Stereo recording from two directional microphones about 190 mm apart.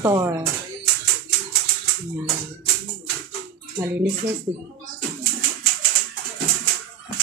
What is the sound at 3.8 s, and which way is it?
Speech, 15° right (ahead or behind).